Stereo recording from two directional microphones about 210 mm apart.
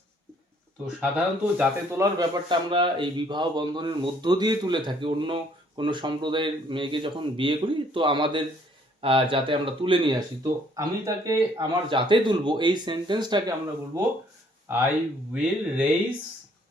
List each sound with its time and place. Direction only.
0.9 s a man's voice: 5° right (ahead or behind); by 13.4 s 20° right (ahead or behind)
14.7 s speech: 10° right (ahead or behind)